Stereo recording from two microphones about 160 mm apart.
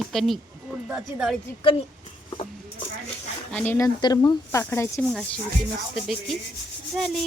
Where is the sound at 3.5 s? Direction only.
10° left (ahead or behind).